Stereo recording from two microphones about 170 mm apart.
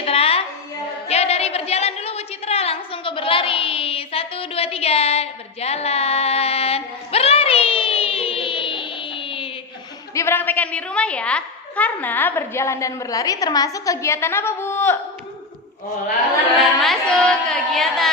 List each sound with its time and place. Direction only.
0.0 s a sound: 35° left (ahead or behind)
10.2 s a woman's voice: 15° left (ahead or behind)
16.6 s music: centre (ahead or behind)